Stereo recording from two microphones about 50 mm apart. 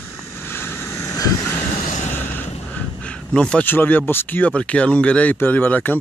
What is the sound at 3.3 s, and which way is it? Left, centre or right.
Speech, centre.